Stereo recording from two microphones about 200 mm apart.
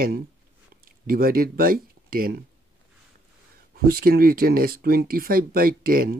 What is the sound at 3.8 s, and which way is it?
Speech, 50° right (ahead or behind).